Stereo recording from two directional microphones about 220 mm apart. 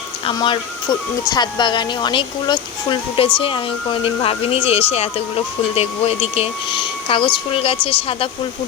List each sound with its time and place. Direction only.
0.3 s speech: 20° left (ahead or behind)